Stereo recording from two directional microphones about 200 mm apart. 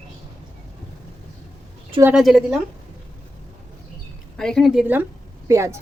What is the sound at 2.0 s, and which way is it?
Speech, 5° right (ahead or behind).